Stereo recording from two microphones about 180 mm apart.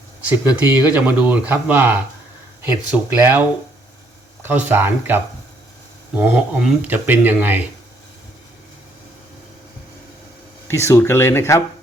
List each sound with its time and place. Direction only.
0.3 s speech: 10° right (ahead or behind)
4.4 s speech: 10° right (ahead or behind)
10.7 s speech: 15° left (ahead or behind)